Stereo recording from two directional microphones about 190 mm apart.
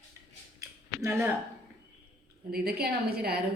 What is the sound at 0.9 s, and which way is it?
Speech, 15° right (ahead or behind).